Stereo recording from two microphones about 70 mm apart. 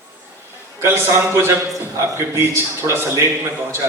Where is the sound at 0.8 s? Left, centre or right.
Right.